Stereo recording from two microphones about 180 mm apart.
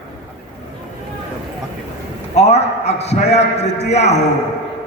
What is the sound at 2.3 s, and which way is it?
A man's voice, 35° left (ahead or behind).